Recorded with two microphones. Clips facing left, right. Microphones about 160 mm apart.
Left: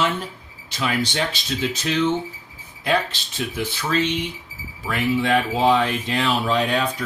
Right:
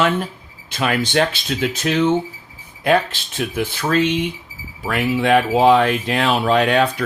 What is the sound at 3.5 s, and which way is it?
Speech, 55° right (ahead or behind).